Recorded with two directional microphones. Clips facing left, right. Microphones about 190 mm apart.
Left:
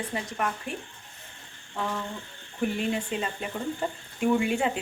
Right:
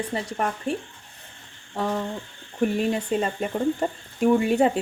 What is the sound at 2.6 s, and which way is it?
Speech, 40° right (ahead or behind).